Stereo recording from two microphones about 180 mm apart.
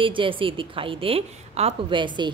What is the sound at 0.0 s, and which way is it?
A woman's voice, 30° right (ahead or behind).